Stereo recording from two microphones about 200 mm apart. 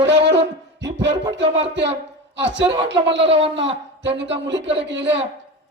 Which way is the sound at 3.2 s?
30° right (ahead or behind).